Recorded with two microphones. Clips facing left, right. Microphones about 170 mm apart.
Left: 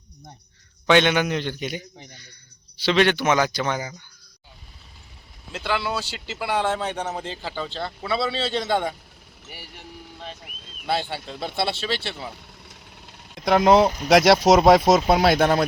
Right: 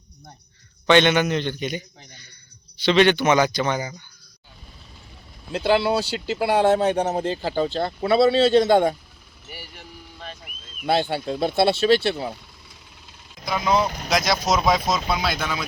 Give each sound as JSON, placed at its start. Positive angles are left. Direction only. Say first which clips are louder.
{"t": 0.9, "sound": "a man's voice", "louder": "right 1 dB", "side_deg": 5}
{"t": 5.5, "sound": "speech", "louder": "right 7 dB", "side_deg": -40}
{"t": 9.5, "sound": "vehicle", "louder": "right 1 dB", "side_deg": 20}
{"t": 10.8, "sound": "speech", "louder": "right 5 dB", "side_deg": -45}
{"t": 12.6, "sound": "speech", "louder": "left 3 dB", "side_deg": 75}